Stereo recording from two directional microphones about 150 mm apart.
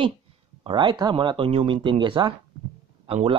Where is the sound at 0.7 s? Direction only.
30° right (ahead or behind).